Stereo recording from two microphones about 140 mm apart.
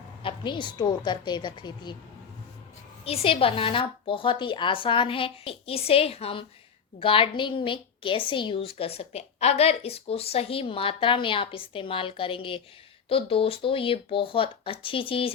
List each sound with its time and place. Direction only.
0.2 s a woman's voice: 35° left (ahead or behind)
3.0 s a woman's voice: 45° left (ahead or behind)